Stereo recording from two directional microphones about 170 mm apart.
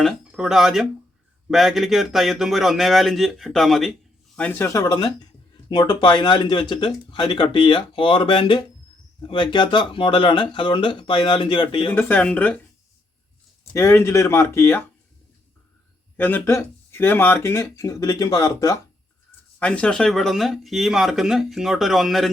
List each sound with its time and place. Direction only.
0.0 s speech: centre (ahead or behind); by 11.9 s 30° left (ahead or behind)
11.9 s speech: 10° left (ahead or behind)
13.7 s speech: 15° left (ahead or behind)
16.1 s speech: 10° left (ahead or behind)
19.5 s speech: 5° left (ahead or behind)